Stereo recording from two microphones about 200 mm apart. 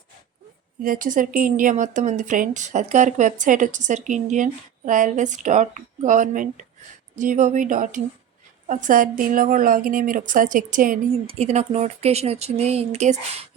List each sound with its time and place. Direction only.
0.8 s a woman's voice: 40° right (ahead or behind)